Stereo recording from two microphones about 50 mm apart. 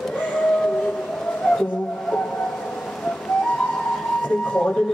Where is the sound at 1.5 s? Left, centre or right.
Centre.